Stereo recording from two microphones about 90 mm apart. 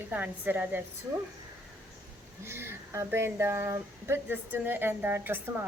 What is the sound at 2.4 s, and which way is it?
Speech, 30° right (ahead or behind).